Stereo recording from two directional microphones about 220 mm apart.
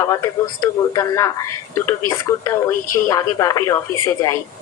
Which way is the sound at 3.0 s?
15° left (ahead or behind).